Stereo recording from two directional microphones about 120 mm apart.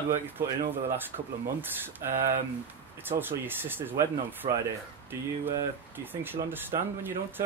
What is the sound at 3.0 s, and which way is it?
Speech, 15° right (ahead or behind).